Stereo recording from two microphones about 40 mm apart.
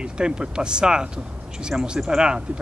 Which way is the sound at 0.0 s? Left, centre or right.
Right.